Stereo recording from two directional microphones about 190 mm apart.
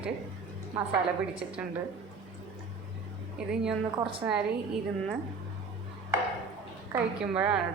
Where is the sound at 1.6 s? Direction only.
5° right (ahead or behind).